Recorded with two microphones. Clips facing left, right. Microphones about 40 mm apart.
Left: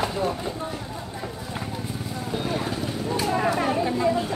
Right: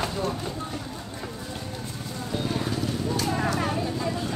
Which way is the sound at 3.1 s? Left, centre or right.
Centre.